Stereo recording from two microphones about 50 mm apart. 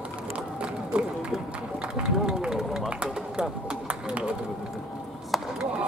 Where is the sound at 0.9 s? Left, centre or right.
Right.